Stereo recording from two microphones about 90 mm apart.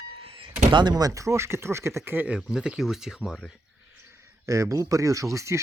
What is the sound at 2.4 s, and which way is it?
Speech, 10° right (ahead or behind).